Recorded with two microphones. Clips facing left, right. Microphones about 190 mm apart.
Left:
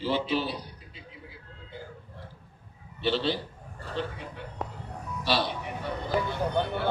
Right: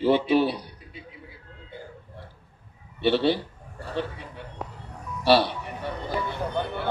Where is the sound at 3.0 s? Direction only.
60° right (ahead or behind).